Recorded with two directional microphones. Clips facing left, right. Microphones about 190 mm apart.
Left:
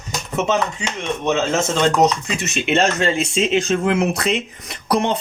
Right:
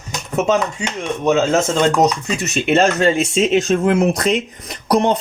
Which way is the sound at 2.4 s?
40° right (ahead or behind).